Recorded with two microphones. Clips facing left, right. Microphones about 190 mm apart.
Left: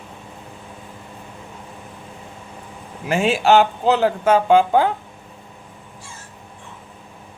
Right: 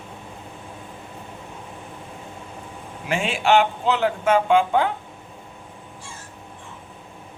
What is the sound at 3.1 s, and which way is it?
Speech, 40° left (ahead or behind).